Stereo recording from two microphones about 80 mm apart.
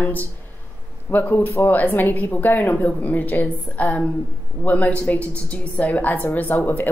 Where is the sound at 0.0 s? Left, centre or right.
Left.